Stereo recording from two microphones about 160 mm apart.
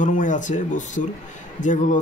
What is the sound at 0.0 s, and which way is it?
Speech, 55° left (ahead or behind).